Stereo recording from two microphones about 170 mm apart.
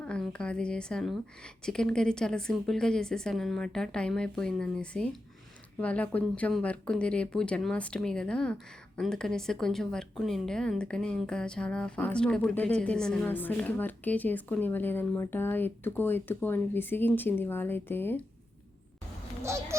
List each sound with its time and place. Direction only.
0.0 s a woman's voice: 5° left (ahead or behind)
19.4 s speech: 15° right (ahead or behind)